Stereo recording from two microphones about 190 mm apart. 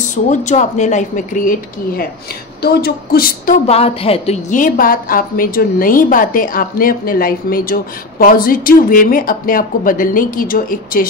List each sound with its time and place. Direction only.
0.1 s speech: 40° left (ahead or behind)
2.6 s a woman's voice: 55° left (ahead or behind)
3.6 s a woman's voice: 30° left (ahead or behind); by 11.1 s 50° left (ahead or behind)